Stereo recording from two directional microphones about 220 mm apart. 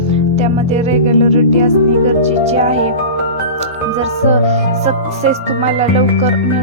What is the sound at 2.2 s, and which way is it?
Speech, 30° right (ahead or behind).